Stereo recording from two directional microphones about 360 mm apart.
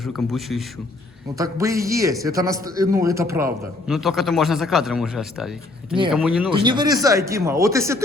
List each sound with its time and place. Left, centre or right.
0.0 s a man's voice: centre